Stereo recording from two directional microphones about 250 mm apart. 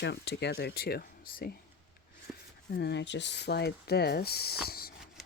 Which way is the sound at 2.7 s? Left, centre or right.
Left.